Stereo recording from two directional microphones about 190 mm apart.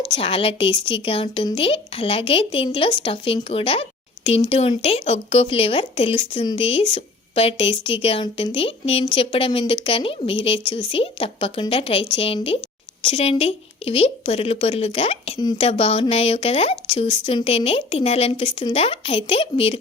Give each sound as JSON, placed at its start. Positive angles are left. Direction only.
{"t": 0.0, "sound": "speech", "side_deg": 25}